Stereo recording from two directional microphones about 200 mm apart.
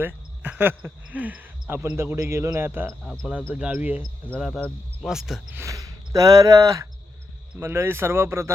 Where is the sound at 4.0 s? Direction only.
5° left (ahead or behind).